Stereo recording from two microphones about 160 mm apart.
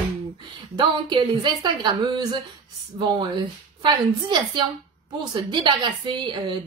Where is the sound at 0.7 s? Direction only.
30° right (ahead or behind).